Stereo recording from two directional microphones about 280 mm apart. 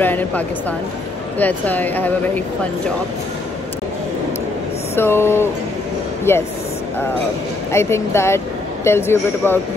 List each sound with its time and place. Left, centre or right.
0.0 s speech: centre
4.9 s speech: centre
7.7 s speech: centre